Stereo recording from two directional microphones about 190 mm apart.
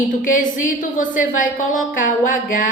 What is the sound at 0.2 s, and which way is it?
A woman's voice, 45° left (ahead or behind).